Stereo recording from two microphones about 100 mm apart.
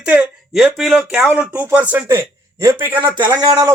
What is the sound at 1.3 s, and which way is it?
Speech, 15° right (ahead or behind).